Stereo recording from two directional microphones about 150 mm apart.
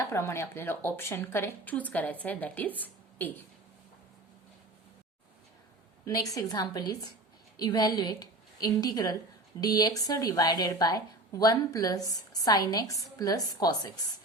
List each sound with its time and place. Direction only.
0.0 s a woman's voice: 20° left (ahead or behind)
6.1 s a woman's voice: 25° left (ahead or behind)